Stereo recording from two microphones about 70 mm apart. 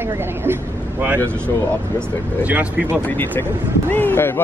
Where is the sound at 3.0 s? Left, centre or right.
Left.